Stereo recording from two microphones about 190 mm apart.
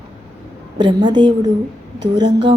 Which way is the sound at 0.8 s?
25° right (ahead or behind).